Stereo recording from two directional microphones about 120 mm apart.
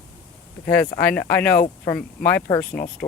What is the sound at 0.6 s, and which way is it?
Speech, 15° left (ahead or behind).